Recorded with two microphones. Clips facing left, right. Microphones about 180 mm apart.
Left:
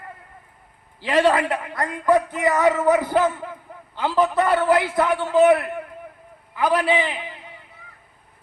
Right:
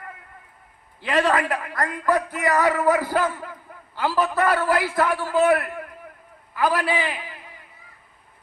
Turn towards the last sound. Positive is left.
turn(degrees=20)  # may be behind; listen again after turning